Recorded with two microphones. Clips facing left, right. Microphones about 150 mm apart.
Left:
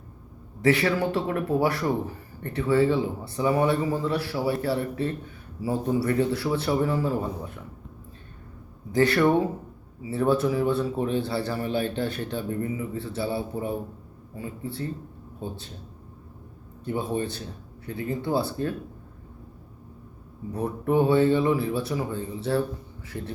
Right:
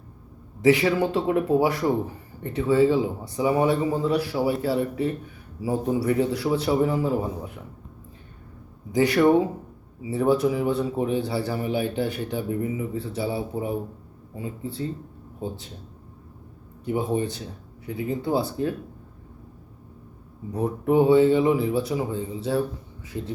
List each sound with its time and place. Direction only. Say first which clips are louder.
0.6 s a man's voice: right 3 dB; 15° right (ahead or behind)
8.9 s a man's voice: right 2 dB; 15° right (ahead or behind)
16.8 s a man's voice: right 3 dB; 15° right (ahead or behind)
20.5 s a man's voice: right 3 dB; 15° right (ahead or behind)